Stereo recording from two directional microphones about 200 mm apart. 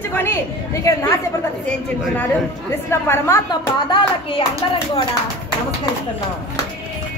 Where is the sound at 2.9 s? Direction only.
15° left (ahead or behind).